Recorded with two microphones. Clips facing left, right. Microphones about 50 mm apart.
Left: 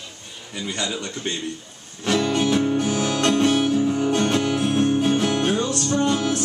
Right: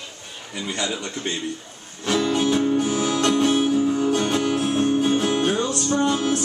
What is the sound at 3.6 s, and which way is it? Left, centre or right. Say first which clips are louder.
Music: even; centre.